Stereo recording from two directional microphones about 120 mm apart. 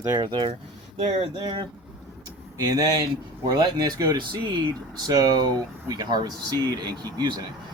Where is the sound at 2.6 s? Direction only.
30° right (ahead or behind).